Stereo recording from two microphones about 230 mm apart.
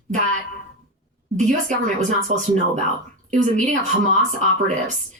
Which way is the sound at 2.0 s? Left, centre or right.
Right.